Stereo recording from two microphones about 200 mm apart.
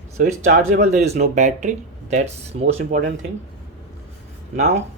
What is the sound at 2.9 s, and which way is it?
Speech, 50° right (ahead or behind).